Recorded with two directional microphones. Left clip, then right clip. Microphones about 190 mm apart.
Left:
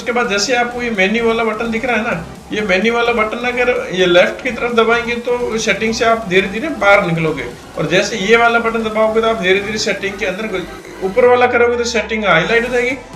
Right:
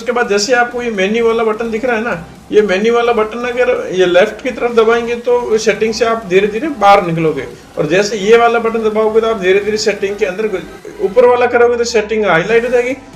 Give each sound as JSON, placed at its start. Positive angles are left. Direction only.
{"t": 0.1, "sound": "a man's voice", "side_deg": -45}
{"t": 2.6, "sound": "a man's voice", "side_deg": -45}
{"t": 11.3, "sound": "a man's voice", "side_deg": -45}